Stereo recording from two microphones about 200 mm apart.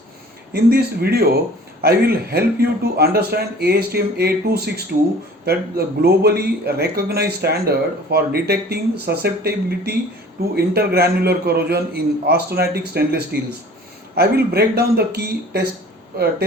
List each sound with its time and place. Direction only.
0.5 s speech: 55° right (ahead or behind)